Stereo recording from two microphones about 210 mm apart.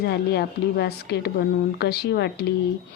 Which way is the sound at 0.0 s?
50° left (ahead or behind).